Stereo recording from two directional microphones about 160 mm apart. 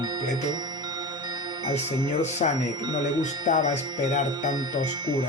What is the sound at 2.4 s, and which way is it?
Speech, 50° left (ahead or behind).